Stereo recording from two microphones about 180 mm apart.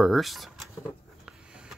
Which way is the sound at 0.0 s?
Centre (ahead or behind).